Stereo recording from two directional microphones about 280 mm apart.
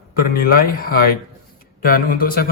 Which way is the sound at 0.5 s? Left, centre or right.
Left.